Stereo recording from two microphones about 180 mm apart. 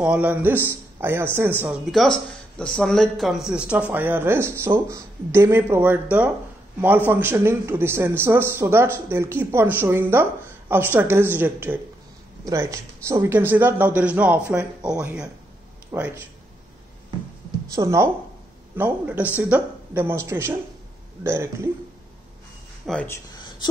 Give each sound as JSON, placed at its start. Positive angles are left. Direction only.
{"t": 0.0, "sound": "speech", "side_deg": -5}
{"t": 1.9, "sound": "speech", "side_deg": 0}
{"t": 17.7, "sound": "speech", "side_deg": -15}
{"t": 22.8, "sound": "speech", "side_deg": 10}